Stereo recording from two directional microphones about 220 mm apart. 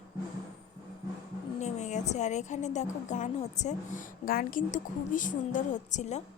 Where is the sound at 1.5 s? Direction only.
30° left (ahead or behind).